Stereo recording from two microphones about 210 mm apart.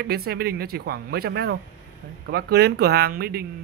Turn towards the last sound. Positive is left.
turn(degrees=-45)  # may be behind; listen again after turning